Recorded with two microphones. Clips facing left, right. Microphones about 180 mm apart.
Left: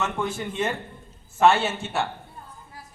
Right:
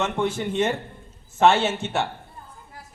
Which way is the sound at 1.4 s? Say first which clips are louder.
Right 1 dB; 20° right (ahead or behind).